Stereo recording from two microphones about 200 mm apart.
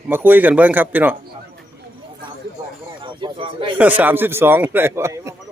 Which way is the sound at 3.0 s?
25° right (ahead or behind).